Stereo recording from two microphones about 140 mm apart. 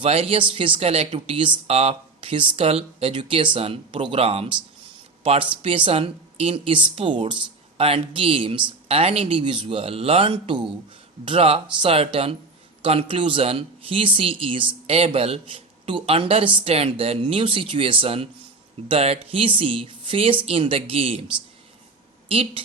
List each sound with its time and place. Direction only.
0.0 s speech: 45° right (ahead or behind)
22.3 s speech: 45° right (ahead or behind)